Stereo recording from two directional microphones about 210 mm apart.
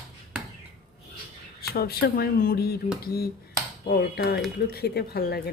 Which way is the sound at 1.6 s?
45° left (ahead or behind).